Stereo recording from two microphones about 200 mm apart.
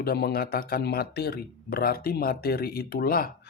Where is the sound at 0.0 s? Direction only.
50° left (ahead or behind).